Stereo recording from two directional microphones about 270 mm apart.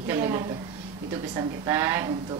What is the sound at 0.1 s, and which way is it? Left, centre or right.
A woman's voice, centre.